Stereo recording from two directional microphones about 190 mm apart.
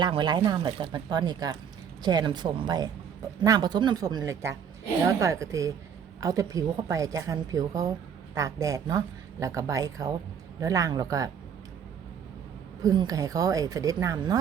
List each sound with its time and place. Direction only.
0.0 s a woman's voice: 25° right (ahead or behind)
12.8 s speech: 20° right (ahead or behind)